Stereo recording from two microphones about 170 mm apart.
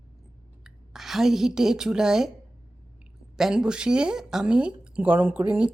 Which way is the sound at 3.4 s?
5° right (ahead or behind).